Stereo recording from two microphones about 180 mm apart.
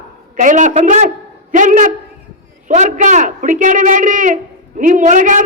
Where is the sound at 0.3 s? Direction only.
45° right (ahead or behind).